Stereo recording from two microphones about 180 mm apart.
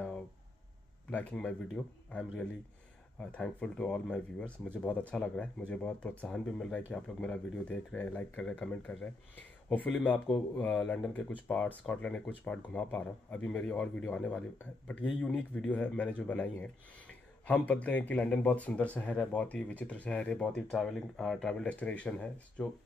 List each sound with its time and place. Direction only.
1.1 s a man's voice: 5° left (ahead or behind)